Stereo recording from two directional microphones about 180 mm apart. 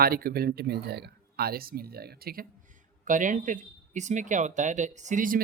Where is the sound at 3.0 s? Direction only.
45° right (ahead or behind).